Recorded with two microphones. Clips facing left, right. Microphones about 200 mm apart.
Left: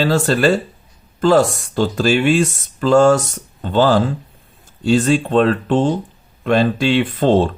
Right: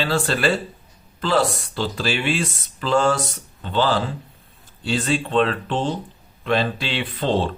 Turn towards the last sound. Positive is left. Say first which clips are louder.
# left 7 dB
turn(degrees=45)  # may be behind; listen again after turning